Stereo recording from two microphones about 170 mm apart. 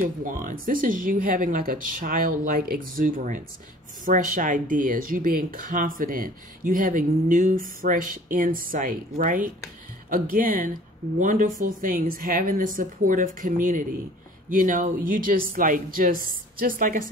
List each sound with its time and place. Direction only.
0.0 s speech: 55° right (ahead or behind)